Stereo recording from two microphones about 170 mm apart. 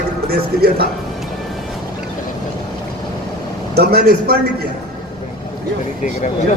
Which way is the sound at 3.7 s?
65° right (ahead or behind).